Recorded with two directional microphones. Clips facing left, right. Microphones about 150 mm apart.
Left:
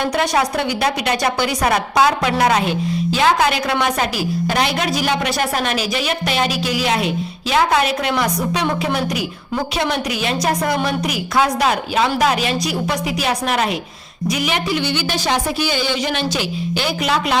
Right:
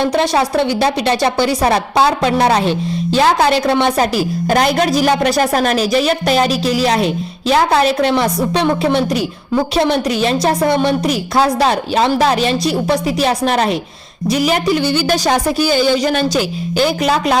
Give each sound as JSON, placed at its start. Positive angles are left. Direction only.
{"t": 0.0, "sound": "a woman's voice", "side_deg": -25}